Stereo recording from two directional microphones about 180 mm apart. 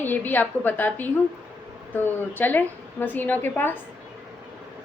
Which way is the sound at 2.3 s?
10° left (ahead or behind).